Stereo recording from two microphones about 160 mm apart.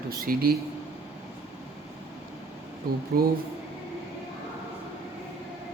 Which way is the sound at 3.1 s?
65° right (ahead or behind).